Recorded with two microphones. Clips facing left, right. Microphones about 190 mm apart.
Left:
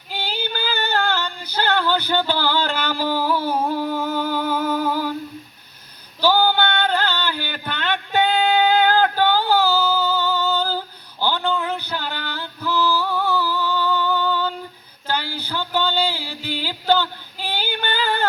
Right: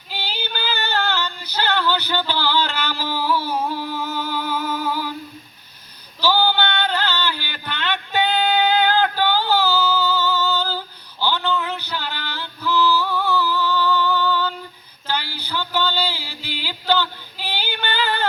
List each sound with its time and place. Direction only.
0.1 s female singing: 50° left (ahead or behind)
3.7 s humming: 45° left (ahead or behind)
6.1 s a sound: 50° left (ahead or behind)
15.0 s music: 45° left (ahead or behind)